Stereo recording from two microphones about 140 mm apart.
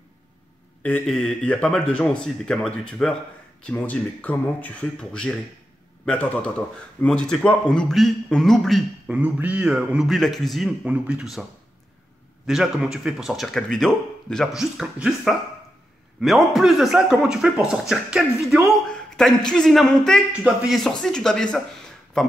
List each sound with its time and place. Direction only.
0.8 s speech: 5° left (ahead or behind)
9.1 s speech: 10° right (ahead or behind)
12.4 s speech: 5° right (ahead or behind)